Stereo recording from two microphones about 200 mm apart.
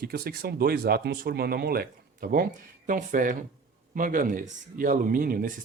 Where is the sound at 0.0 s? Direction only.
50° right (ahead or behind).